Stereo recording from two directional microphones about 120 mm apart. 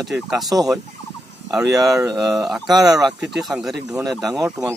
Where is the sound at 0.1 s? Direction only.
5° right (ahead or behind).